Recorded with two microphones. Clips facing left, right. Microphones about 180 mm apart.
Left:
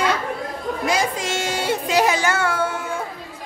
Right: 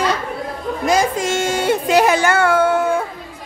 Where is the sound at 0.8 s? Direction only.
45° right (ahead or behind).